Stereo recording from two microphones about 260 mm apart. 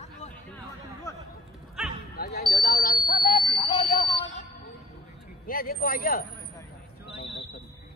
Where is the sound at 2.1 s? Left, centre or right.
Left.